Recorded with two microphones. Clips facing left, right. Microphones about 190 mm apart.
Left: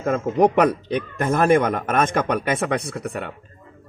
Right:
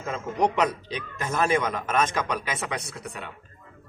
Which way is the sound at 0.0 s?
55° left (ahead or behind).